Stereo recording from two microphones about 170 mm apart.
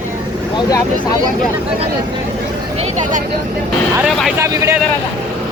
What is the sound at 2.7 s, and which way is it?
Speech, 40° right (ahead or behind).